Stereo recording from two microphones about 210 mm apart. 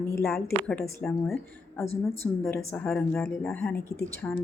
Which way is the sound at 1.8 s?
30° left (ahead or behind).